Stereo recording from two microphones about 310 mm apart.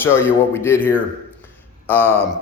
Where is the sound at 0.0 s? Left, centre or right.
Centre.